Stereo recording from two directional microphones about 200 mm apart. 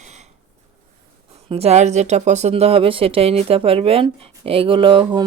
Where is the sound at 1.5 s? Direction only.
30° right (ahead or behind).